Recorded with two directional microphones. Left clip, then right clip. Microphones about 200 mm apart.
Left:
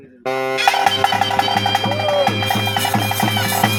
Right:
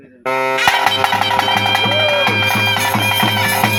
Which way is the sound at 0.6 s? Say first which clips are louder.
Even; centre (ahead or behind).